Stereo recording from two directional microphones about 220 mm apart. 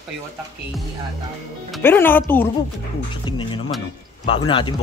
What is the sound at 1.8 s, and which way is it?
Speech, 10° left (ahead or behind).